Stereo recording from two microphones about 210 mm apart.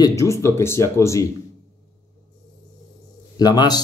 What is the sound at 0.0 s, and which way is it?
A man's voice, 15° left (ahead or behind).